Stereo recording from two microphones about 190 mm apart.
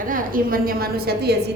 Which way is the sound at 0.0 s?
45° right (ahead or behind).